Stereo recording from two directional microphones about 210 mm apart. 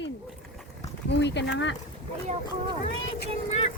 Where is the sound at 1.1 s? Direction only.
55° left (ahead or behind).